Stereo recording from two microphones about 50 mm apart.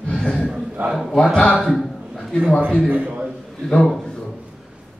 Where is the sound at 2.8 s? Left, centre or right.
Right.